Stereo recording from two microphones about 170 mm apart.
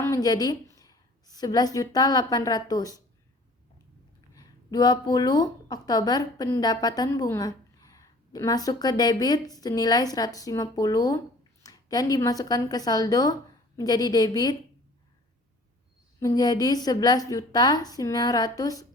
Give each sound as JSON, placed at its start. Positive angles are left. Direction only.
{"t": 0.0, "sound": "a woman's voice", "side_deg": 20}
{"t": 4.4, "sound": "a woman's voice", "side_deg": 25}
{"t": 16.2, "sound": "a woman's voice", "side_deg": 20}